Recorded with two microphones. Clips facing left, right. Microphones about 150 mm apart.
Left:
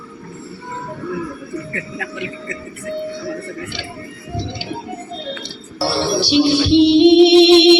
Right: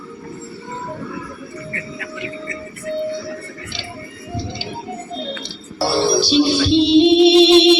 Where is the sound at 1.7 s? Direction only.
90° left.